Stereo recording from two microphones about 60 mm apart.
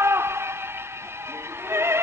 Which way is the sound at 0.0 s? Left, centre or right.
Right.